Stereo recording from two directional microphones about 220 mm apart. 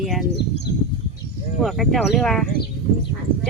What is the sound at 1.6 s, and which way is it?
Speech, centre (ahead or behind).